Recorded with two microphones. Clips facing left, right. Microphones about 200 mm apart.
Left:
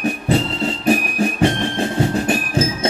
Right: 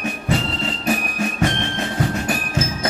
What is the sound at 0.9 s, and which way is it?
Music, 30° left (ahead or behind).